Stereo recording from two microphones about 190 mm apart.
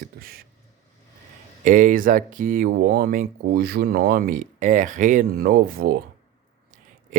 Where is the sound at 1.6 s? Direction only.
45° right (ahead or behind).